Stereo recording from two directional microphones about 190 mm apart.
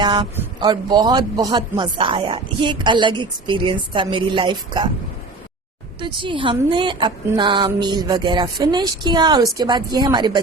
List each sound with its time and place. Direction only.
0.0 s a man's voice: 25° right (ahead or behind)
6.0 s a man's voice: 25° right (ahead or behind)